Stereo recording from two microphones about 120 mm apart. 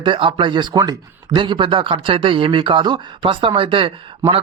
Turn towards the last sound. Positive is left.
turn(degrees=-45)  # may be behind; listen again after turning